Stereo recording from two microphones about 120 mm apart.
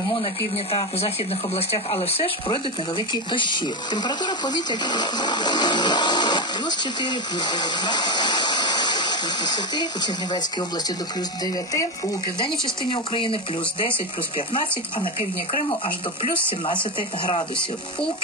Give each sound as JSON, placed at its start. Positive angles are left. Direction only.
{"t": 0.2, "sound": "speech", "side_deg": 50}
{"t": 12.9, "sound": "speech", "side_deg": 45}